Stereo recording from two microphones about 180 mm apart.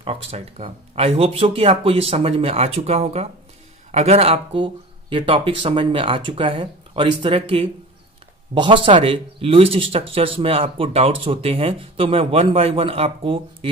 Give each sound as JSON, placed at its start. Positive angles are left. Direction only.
{"t": 0.0, "sound": "speech", "side_deg": -35}